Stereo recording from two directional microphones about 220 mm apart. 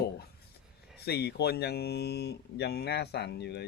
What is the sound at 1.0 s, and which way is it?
Speech, 45° left (ahead or behind).